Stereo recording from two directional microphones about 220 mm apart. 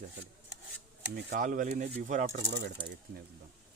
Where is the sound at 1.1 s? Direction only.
40° right (ahead or behind).